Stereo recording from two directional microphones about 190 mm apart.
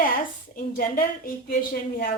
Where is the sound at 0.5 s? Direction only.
50° left (ahead or behind).